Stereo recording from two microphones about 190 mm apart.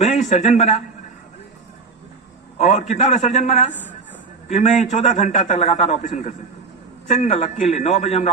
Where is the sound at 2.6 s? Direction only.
40° left (ahead or behind).